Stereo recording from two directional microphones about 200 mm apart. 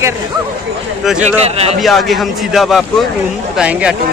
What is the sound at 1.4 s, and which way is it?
Speech, 30° right (ahead or behind).